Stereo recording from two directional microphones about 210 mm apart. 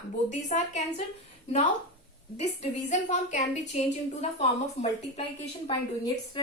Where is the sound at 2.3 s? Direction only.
35° left (ahead or behind).